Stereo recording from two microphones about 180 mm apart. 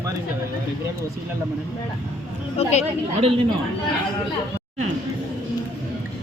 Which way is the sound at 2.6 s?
35° left (ahead or behind).